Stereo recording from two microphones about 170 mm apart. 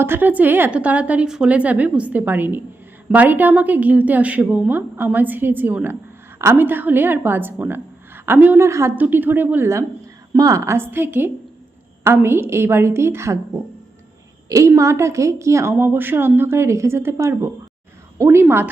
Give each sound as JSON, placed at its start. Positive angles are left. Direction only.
{"t": 0.0, "sound": "a woman's voice", "side_deg": -10}
{"t": 14.8, "sound": "a woman's voice", "side_deg": -15}